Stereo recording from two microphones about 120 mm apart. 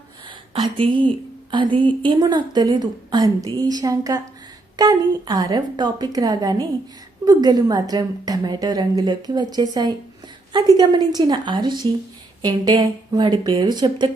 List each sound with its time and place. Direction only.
0.3 s a woman's voice: 45° right (ahead or behind)